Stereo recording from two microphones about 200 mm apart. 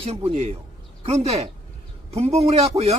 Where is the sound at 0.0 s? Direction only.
30° right (ahead or behind).